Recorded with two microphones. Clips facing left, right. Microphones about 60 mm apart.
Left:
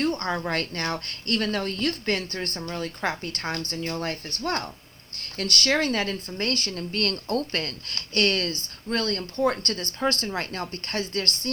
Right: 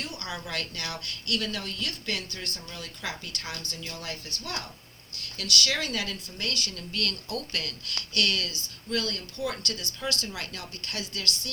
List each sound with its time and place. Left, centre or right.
0.0 s speech: left